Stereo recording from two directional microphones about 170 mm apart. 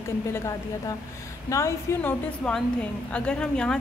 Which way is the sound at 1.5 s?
15° left (ahead or behind).